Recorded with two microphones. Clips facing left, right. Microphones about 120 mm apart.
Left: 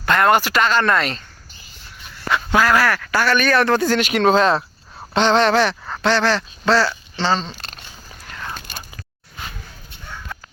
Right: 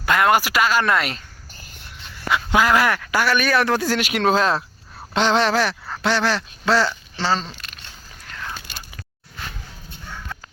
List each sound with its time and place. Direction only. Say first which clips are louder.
0.0 s speech: left 2 dB; 5° right (ahead or behind)
2.3 s speech: left 1 dB; 15° right (ahead or behind)